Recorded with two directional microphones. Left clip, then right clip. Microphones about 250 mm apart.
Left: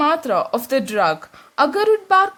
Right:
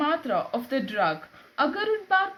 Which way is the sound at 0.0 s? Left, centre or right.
Left.